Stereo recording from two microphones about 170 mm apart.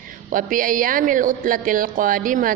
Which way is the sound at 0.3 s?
50° right (ahead or behind).